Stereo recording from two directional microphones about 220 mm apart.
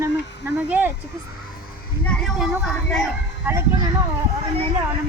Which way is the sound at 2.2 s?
Centre (ahead or behind).